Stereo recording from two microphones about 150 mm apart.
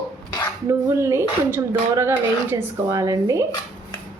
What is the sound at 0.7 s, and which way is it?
Speech, 20° right (ahead or behind).